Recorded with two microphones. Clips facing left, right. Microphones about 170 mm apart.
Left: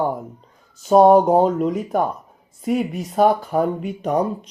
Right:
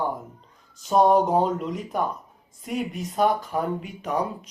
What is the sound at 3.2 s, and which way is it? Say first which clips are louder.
Speech: left 6 dB; 50° left (ahead or behind).